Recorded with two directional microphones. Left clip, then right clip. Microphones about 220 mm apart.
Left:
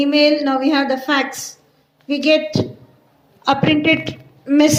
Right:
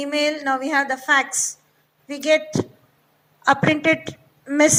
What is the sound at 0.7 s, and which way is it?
Speech, 60° right (ahead or behind).